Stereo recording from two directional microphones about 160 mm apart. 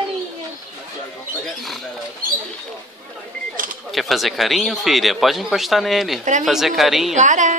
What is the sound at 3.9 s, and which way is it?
Speech, centre (ahead or behind).